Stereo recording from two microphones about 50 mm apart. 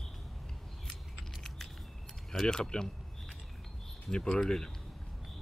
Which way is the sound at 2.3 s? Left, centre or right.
Centre.